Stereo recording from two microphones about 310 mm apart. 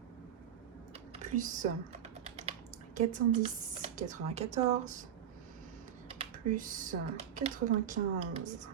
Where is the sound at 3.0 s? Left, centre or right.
Right.